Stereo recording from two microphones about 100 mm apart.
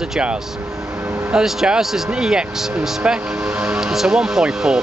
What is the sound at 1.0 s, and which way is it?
Music, 20° right (ahead or behind).